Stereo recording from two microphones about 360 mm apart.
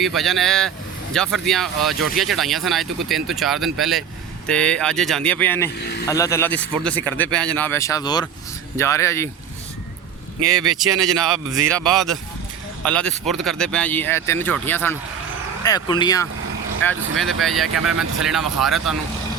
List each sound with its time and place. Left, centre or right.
0.0 s speech: centre
5.8 s speech: left
6.1 s speech: centre
10.5 s speech: centre